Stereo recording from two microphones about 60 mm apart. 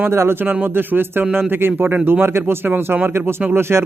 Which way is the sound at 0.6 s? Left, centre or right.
Right.